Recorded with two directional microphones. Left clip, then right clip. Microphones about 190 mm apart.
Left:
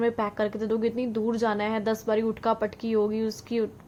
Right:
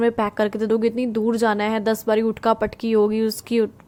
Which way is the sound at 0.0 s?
35° right (ahead or behind).